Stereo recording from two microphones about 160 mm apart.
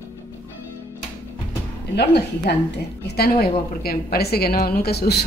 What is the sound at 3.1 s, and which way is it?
A woman's voice, 75° left (ahead or behind).